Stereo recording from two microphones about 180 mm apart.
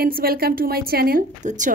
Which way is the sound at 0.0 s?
55° right (ahead or behind).